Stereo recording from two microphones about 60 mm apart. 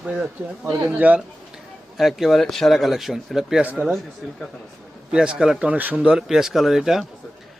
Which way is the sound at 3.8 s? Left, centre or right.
Right.